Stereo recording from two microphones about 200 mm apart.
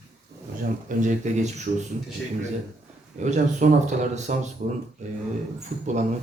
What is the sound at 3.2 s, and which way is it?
Speech, 35° right (ahead or behind).